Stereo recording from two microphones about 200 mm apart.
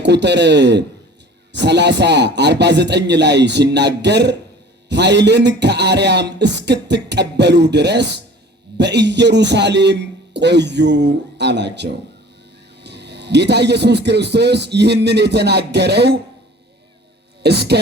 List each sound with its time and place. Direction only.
0.0 s a man's voice: 60° right (ahead or behind)
17.4 s a man's voice: 55° right (ahead or behind)